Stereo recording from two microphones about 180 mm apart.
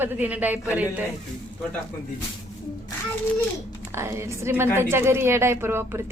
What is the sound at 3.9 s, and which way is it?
A woman's voice, 15° right (ahead or behind).